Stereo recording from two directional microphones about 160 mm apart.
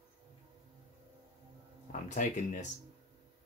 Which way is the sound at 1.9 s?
50° left (ahead or behind).